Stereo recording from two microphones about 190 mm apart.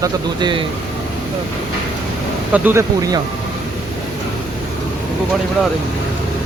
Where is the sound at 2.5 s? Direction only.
10° right (ahead or behind).